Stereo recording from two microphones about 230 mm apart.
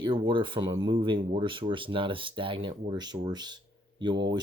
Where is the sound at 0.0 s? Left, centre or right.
Right.